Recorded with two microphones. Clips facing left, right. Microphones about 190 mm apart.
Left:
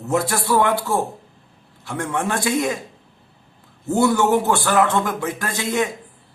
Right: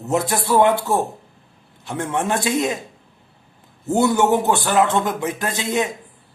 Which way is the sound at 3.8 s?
20° right (ahead or behind).